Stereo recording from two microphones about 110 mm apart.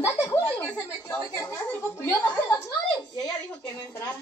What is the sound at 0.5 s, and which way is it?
Speech, 10° left (ahead or behind).